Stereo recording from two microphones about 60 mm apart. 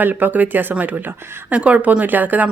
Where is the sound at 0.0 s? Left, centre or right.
Right.